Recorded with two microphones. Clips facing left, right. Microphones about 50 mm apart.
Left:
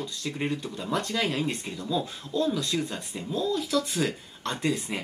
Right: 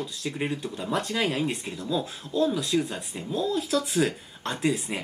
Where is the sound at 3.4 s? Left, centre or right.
Right.